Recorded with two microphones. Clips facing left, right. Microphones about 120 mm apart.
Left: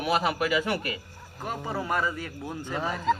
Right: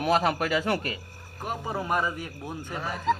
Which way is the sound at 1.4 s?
15° right (ahead or behind).